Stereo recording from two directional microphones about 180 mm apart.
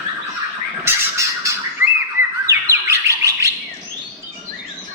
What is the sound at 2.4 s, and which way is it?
Bird, 15° right (ahead or behind).